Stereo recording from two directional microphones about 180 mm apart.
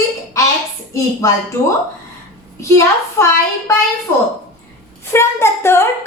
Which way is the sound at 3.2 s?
15° left (ahead or behind).